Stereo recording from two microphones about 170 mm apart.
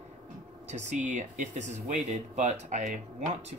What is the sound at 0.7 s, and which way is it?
Speech, 40° right (ahead or behind).